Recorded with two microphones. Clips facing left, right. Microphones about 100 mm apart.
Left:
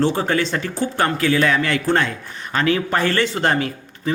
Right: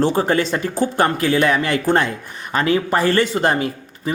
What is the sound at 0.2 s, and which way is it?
Speech, 35° right (ahead or behind).